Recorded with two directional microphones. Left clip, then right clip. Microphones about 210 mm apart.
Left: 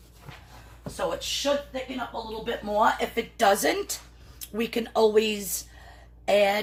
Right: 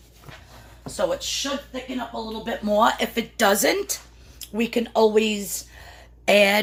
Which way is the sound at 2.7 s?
50° right (ahead or behind).